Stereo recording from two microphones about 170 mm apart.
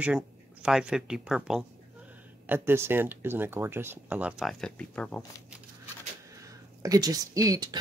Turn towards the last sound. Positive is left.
turn(degrees=-20)  # may be behind; listen again after turning